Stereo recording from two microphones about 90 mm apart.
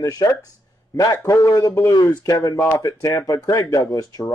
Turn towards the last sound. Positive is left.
turn(degrees=40)  # may be behind; listen again after turning